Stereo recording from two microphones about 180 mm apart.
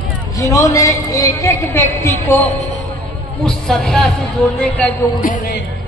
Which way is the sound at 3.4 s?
5° left (ahead or behind).